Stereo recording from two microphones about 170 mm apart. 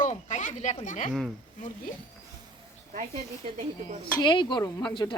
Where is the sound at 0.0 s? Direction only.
45° left (ahead or behind).